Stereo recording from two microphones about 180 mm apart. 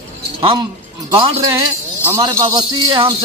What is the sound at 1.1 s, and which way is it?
Speech, 25° right (ahead or behind).